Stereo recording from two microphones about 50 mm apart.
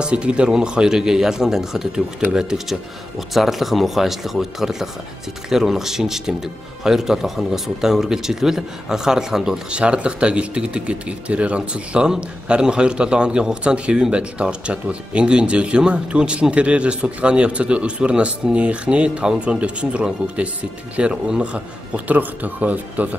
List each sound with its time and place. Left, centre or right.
0.0 s speech: right
9.7 s speech: right